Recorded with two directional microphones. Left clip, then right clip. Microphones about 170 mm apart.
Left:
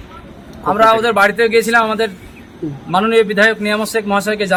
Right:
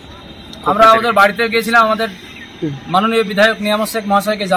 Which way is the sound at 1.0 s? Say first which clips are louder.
Even; 40° left (ahead or behind).